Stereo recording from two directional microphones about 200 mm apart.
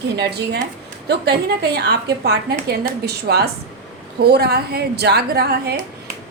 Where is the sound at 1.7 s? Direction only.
55° right (ahead or behind).